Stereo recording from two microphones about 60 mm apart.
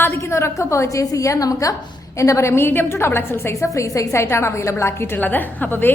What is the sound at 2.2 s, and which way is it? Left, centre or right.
A woman's voice, left.